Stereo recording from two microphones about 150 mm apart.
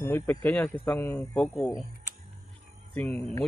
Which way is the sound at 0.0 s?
15° left (ahead or behind).